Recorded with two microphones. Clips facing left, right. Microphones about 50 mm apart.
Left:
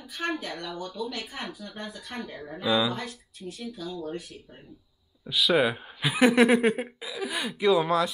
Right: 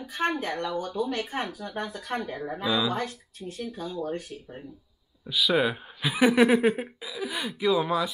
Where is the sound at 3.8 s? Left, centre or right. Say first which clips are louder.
Right 3 dB; right.